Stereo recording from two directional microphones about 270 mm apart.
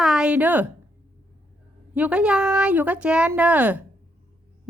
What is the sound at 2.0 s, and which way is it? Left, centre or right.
A woman's voice, centre.